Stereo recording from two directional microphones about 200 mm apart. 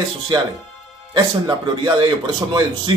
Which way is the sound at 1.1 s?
20° right (ahead or behind).